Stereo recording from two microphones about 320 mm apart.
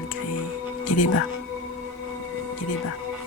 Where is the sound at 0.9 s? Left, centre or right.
Left.